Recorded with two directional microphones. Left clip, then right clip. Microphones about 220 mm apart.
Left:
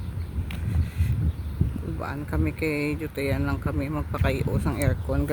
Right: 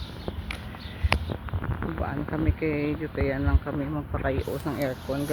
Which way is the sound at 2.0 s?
30° left (ahead or behind).